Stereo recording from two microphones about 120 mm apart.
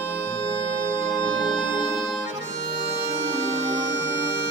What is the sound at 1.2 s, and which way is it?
Music, 40° left (ahead or behind).